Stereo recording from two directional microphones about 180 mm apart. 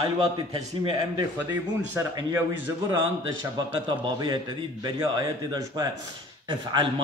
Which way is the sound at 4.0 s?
25° right (ahead or behind).